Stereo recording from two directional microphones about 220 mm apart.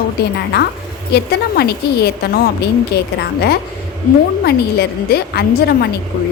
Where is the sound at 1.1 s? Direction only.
45° left (ahead or behind).